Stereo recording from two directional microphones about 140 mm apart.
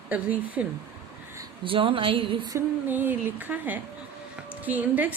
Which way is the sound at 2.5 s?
15° right (ahead or behind).